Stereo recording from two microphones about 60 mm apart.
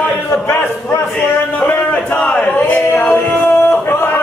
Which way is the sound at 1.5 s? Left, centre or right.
Left.